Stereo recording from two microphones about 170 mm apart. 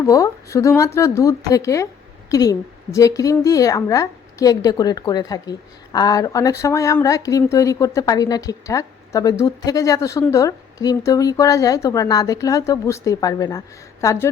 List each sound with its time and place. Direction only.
0.0 s a woman's voice: 20° left (ahead or behind)